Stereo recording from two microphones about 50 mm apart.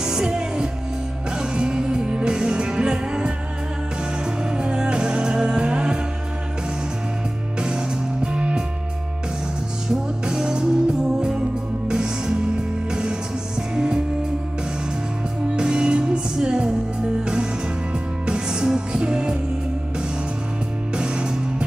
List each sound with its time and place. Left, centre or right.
0.0 s music: centre
4.5 s music: centre
7.6 s music: centre
9.8 s music: centre
15.5 s music: centre
20.9 s music: centre